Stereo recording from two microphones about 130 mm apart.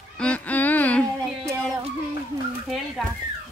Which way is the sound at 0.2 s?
10° left (ahead or behind).